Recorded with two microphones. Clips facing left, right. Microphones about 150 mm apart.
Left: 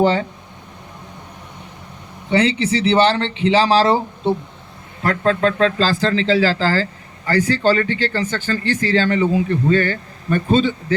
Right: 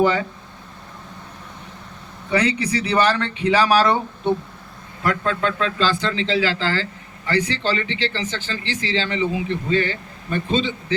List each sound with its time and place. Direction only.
0.0 s speech: 30° left (ahead or behind)
2.3 s speech: 25° left (ahead or behind); by 10.9 s 45° left (ahead or behind)